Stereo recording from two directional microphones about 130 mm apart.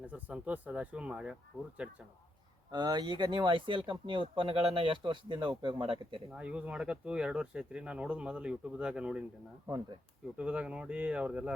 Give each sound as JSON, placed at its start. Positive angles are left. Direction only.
{"t": 0.1, "sound": "speech", "side_deg": -10}
{"t": 2.7, "sound": "speech", "side_deg": -30}
{"t": 6.3, "sound": "speech", "side_deg": -10}
{"t": 9.6, "sound": "speech", "side_deg": -30}
{"t": 10.3, "sound": "speech", "side_deg": -10}